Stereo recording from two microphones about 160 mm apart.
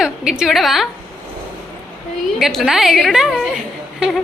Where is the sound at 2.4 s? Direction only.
Centre (ahead or behind).